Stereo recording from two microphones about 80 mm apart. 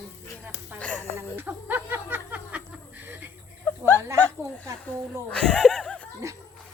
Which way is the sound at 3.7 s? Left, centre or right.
Left.